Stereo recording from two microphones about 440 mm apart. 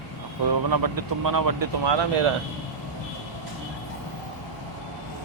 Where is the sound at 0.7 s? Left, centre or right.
Right.